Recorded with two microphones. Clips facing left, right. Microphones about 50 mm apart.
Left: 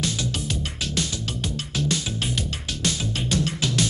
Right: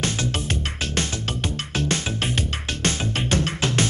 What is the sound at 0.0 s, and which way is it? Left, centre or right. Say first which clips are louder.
Music: right 2 dB; right.